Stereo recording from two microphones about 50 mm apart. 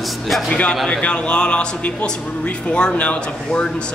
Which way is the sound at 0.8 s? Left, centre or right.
Centre.